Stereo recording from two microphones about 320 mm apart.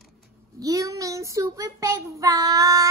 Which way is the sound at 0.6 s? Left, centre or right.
Centre.